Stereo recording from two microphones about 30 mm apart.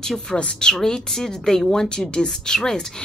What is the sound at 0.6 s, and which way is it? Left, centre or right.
Speech, left.